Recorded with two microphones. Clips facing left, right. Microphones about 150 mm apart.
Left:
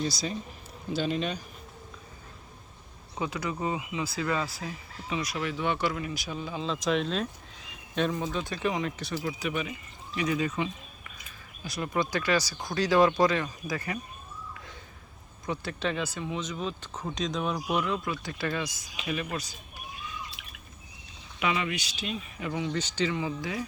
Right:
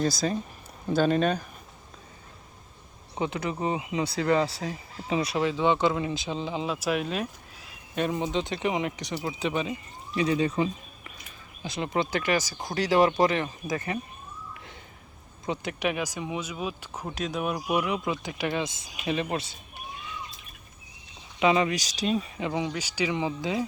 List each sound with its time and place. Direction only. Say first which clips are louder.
0.0 s speech: right 5 dB; 50° right (ahead or behind)
3.2 s speech: right 3 dB; 25° right (ahead or behind)
15.4 s speech: right 2 dB; 15° right (ahead or behind)
21.3 s speech: right 7 dB; 30° right (ahead or behind)
22.4 s speech: right 1 dB; 20° right (ahead or behind)
22.7 s speech: even; 10° right (ahead or behind)